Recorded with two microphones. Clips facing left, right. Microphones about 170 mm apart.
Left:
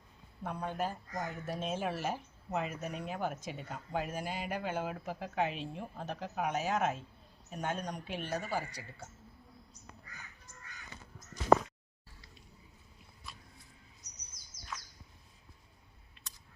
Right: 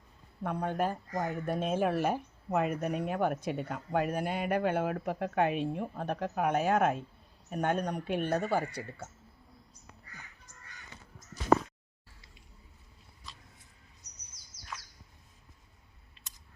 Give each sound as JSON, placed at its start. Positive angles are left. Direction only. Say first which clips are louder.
{"t": 0.4, "sound": "speech", "louder": "right 5 dB", "side_deg": -55}
{"t": 14.3, "sound": "bird", "louder": "even", "side_deg": -65}